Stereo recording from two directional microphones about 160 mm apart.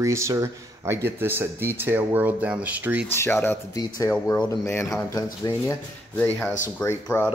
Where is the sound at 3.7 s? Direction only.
25° left (ahead or behind).